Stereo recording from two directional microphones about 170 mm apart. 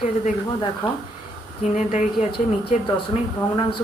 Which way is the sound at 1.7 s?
45° left (ahead or behind).